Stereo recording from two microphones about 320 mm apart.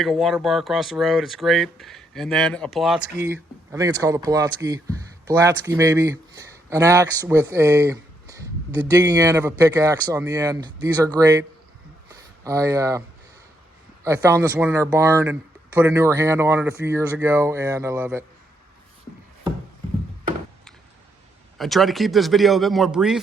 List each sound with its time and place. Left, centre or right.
0.0 s speech: centre
12.5 s speech: centre
14.0 s speech: centre
21.6 s speech: centre